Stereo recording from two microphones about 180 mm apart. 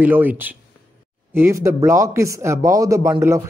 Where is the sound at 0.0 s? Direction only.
10° right (ahead or behind).